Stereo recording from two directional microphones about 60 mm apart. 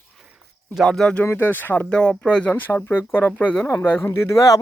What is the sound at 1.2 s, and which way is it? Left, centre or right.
Speech, left.